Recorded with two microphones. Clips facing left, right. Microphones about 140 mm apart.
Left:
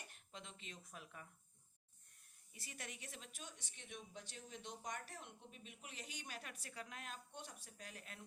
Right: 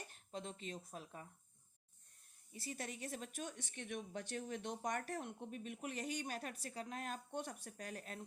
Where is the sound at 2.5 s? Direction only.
35° right (ahead or behind).